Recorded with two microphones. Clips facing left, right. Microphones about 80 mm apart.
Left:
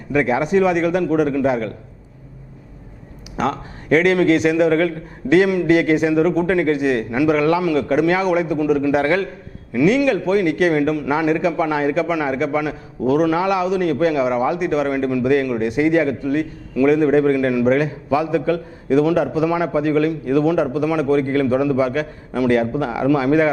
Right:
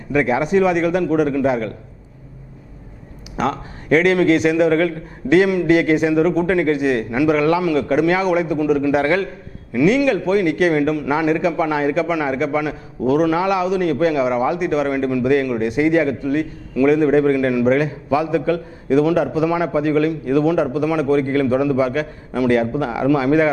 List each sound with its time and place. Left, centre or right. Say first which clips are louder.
0.1 s a man's voice: even; right
3.3 s a man's voice: even; right